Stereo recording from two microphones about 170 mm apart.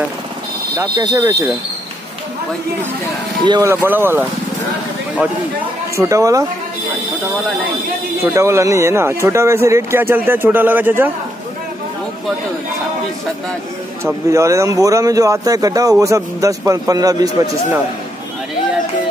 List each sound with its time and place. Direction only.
0.7 s speech: 20° right (ahead or behind)
3.4 s speech: 25° right (ahead or behind)
3.8 s speech: 15° right (ahead or behind)
5.9 s speech: 20° right (ahead or behind)
8.2 s speech: 15° right (ahead or behind)
14.3 s speech: 20° right (ahead or behind)